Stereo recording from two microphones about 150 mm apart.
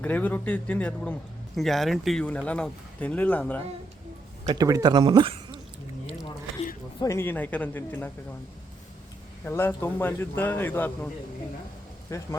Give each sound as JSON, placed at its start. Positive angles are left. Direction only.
{"t": 0.0, "sound": "speech", "side_deg": 10}
{"t": 4.4, "sound": "speech", "side_deg": -25}
{"t": 7.0, "sound": "speech", "side_deg": 20}
{"t": 9.4, "sound": "speech", "side_deg": 15}
{"t": 12.1, "sound": "speech", "side_deg": 20}